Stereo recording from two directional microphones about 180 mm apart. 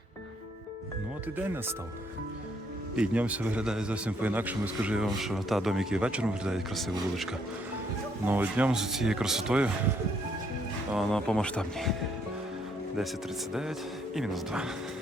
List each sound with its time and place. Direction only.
1.4 s speech: 10° right (ahead or behind)
2.9 s speech: 5° right (ahead or behind)
8.2 s speech: 10° right (ahead or behind)
10.9 s speech: centre (ahead or behind)
13.5 s speech: centre (ahead or behind)